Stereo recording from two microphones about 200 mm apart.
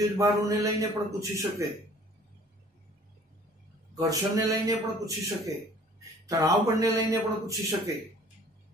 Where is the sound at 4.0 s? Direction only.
15° right (ahead or behind).